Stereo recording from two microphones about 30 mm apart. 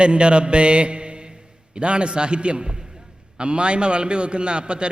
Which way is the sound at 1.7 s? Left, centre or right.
Right.